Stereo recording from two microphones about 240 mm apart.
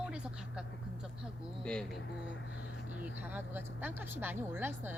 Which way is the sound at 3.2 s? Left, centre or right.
Centre.